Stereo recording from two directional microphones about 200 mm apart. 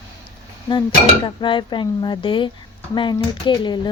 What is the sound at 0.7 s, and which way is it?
A woman's voice, 20° left (ahead or behind).